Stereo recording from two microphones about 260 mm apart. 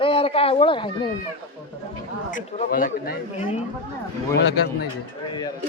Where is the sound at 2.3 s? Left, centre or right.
Left.